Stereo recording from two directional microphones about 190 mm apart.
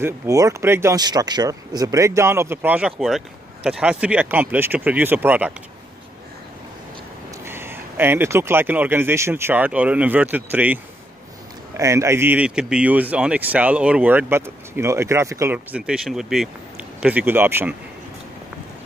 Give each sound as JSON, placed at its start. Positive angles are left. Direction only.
{"t": 0.0, "sound": "speech", "side_deg": -15}
{"t": 7.4, "sound": "speech", "side_deg": -10}